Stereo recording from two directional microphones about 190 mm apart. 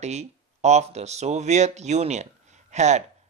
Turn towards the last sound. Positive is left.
turn(degrees=-35)  # may be behind; listen again after turning